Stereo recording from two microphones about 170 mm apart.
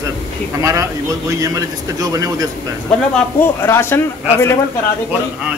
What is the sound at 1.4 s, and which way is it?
Speech, 20° right (ahead or behind).